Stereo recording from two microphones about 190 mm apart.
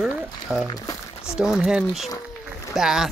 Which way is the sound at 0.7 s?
20° left (ahead or behind).